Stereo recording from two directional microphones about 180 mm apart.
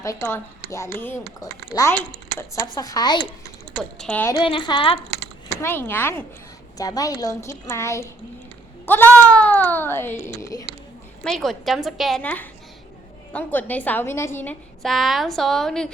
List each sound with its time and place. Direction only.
0.0 s a woman's voice: 15° left (ahead or behind)
3.8 s a woman's voice: 5° left (ahead or behind)
4.4 s a woman's voice: 25° left (ahead or behind)
5.6 s speech: 10° left (ahead or behind)
11.2 s a woman's voice: centre (ahead or behind)
14.8 s a woman's voice: centre (ahead or behind)